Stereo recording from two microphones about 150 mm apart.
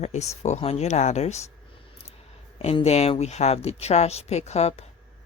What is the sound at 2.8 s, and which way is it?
Speech, 45° left (ahead or behind).